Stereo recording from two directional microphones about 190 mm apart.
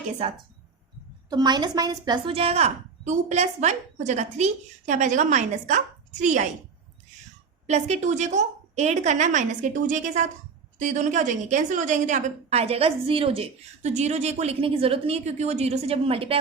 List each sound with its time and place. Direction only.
1.3 s a woman's voice: 20° right (ahead or behind); by 6.5 s 40° right (ahead or behind)
7.7 s a woman's voice: 35° right (ahead or behind)